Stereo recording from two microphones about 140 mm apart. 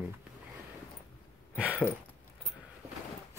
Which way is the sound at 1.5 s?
10° right (ahead or behind).